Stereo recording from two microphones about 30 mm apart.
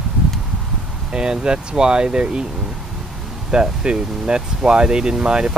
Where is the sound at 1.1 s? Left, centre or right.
Right.